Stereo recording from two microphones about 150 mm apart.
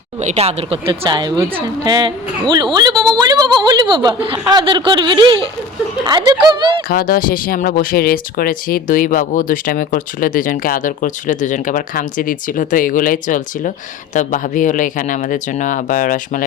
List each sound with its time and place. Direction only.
0.2 s a woman's voice: 50° right (ahead or behind)
6.8 s speech: 75° left (ahead or behind)